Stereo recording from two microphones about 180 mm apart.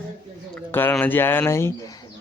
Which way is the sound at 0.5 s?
10° left (ahead or behind).